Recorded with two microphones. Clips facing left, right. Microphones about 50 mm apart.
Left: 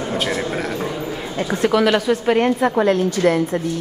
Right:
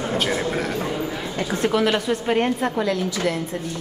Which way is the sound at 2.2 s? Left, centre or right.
Centre.